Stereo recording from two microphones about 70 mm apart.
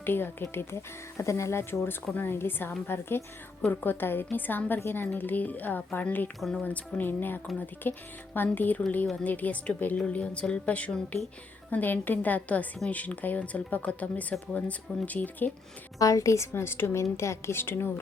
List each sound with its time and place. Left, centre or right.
0.0 s speech: left
16.0 s speech: left